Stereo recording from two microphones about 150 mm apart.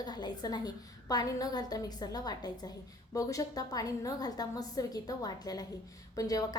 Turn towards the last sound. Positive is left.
turn(degrees=25)  # may be behind; listen again after turning